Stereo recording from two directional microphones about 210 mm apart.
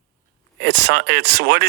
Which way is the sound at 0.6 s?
50° right (ahead or behind).